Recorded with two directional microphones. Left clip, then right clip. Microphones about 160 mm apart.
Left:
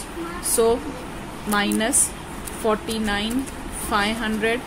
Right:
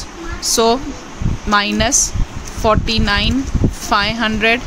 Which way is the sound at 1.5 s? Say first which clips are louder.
Right 8 dB; 60° right (ahead or behind).